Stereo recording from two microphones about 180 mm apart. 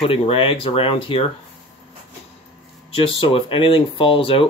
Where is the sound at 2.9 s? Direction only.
30° left (ahead or behind).